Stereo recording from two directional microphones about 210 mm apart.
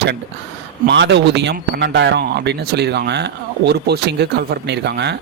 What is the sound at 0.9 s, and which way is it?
Speech, 55° right (ahead or behind).